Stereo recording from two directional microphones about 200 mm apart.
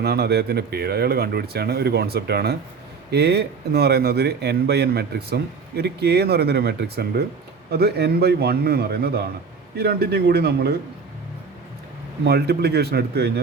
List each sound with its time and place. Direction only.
0.0 s speech: 55° right (ahead or behind)
12.2 s speech: 55° right (ahead or behind)